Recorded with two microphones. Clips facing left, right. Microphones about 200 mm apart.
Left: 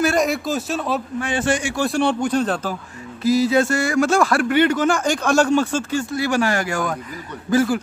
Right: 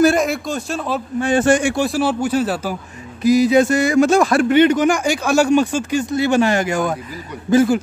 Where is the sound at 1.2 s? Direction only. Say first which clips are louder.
Right 9 dB; 45° right (ahead or behind).